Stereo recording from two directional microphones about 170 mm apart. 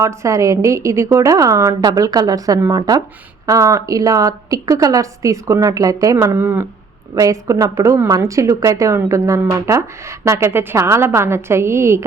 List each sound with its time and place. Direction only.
0.0 s a woman's voice: 20° right (ahead or behind)